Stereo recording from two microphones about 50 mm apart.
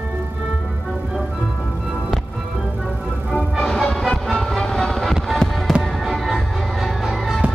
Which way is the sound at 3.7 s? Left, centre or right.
Centre.